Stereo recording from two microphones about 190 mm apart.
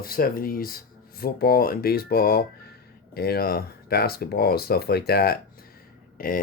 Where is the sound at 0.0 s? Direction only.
50° left (ahead or behind).